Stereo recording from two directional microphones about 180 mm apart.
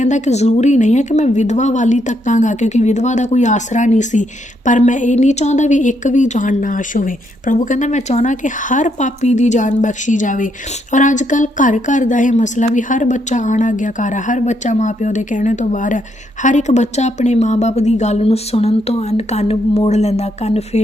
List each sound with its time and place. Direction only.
0.0 s a woman's voice: 40° left (ahead or behind)